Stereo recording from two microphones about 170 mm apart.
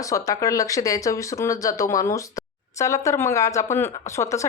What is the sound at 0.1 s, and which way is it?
A woman's voice, 20° left (ahead or behind).